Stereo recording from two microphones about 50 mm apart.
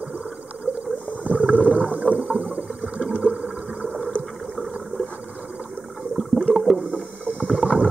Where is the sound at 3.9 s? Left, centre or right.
Centre.